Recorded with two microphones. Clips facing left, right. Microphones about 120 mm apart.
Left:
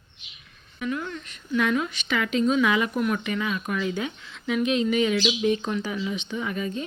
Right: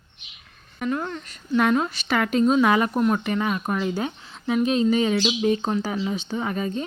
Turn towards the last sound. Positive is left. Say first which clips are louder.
# right 3 dB
turn(degrees=-40)  # may be behind; listen again after turning